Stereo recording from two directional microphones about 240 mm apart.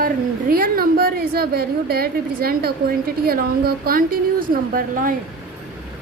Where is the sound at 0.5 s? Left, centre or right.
Right.